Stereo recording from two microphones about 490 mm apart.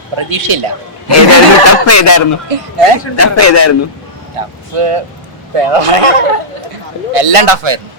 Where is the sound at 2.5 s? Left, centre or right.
Right.